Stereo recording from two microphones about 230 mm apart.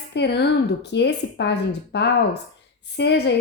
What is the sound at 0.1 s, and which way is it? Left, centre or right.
A woman's voice, left.